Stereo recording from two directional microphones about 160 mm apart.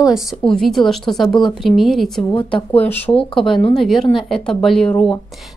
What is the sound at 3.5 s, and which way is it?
Speech, 35° left (ahead or behind).